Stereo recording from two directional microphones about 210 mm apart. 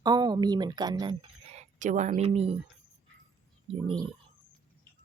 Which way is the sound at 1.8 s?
35° right (ahead or behind).